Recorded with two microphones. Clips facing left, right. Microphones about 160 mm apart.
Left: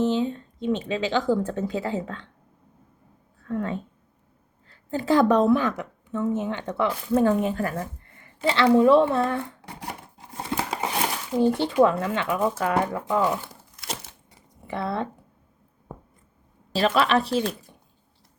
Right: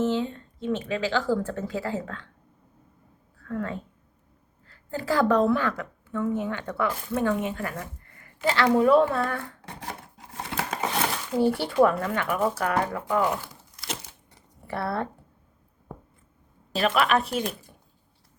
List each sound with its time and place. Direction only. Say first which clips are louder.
0.0 s a woman's voice: left 2 dB; 15° left (ahead or behind)
3.4 s a woman's voice: left 3 dB; 20° left (ahead or behind)
7.2 s a woman's voice: left 5 dB; 35° left (ahead or behind); by 9.9 s 20° left (ahead or behind)
10.6 s a sound: even; 10° left (ahead or behind)
11.3 s a woman's voice: left 2 dB; 20° left (ahead or behind)
14.7 s a woman's voice: left 1 dB; 20° left (ahead or behind)
16.7 s a woman's voice: left 2 dB; 30° left (ahead or behind)